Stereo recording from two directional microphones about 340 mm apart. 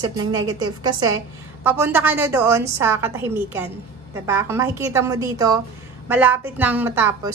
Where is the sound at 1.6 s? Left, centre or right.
Centre.